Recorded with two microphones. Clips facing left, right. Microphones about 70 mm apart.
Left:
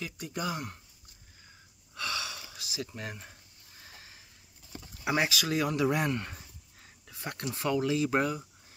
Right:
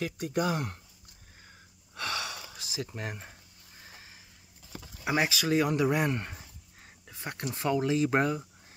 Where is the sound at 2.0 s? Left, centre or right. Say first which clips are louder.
Right 1 dB; right.